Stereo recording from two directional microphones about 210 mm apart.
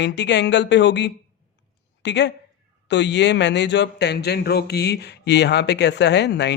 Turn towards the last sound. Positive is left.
turn(degrees=55)  # may be behind; listen again after turning